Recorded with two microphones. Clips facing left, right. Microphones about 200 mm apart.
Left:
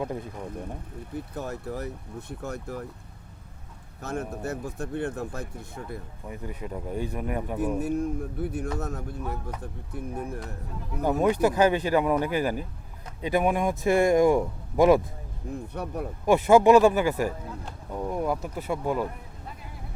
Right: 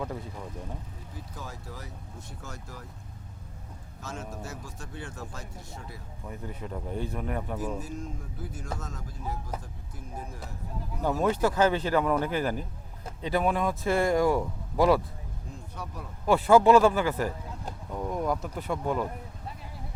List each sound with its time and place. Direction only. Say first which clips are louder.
0.9 s speech: left 9 dB; 60° left (ahead or behind)
4.0 s speech: left 7 dB; 60° left (ahead or behind)
6.2 s speech: left 1 dB; 10° left (ahead or behind)
7.8 s speech: left 10 dB; 65° left (ahead or behind)
11.2 s speech: left 3 dB; 15° left (ahead or behind)
15.7 s speech: left 7 dB; 60° left (ahead or behind)
16.2 s speech: left 2 dB; 15° left (ahead or behind)